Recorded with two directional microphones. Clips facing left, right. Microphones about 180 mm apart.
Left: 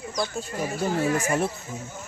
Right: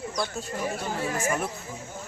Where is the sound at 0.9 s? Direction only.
40° left (ahead or behind).